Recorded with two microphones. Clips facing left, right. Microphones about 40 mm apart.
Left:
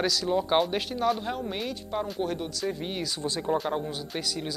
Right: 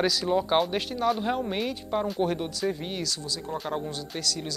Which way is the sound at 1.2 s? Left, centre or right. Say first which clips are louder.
Right 4 dB; centre.